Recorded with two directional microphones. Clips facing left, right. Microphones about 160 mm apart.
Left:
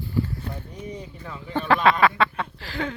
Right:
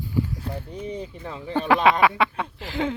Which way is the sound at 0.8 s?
30° right (ahead or behind).